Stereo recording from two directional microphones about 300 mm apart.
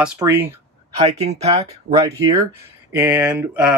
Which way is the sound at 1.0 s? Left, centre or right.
Right.